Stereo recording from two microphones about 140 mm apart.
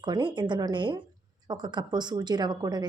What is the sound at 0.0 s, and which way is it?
A woman's voice, 35° right (ahead or behind).